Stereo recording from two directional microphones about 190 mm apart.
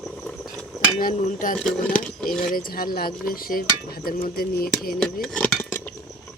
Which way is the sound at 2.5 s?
50° left (ahead or behind).